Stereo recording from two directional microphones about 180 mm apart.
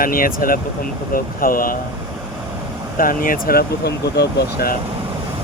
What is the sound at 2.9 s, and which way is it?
Speech, 50° left (ahead or behind).